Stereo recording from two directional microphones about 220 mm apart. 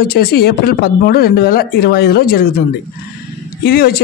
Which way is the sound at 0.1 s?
45° left (ahead or behind).